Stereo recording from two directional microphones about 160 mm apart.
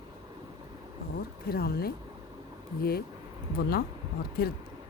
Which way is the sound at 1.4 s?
75° left (ahead or behind).